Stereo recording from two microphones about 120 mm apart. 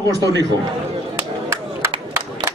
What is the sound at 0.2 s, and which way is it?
Speech, 30° right (ahead or behind).